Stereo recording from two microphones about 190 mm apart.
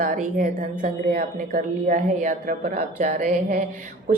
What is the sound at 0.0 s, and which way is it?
A woman's voice, 45° right (ahead or behind).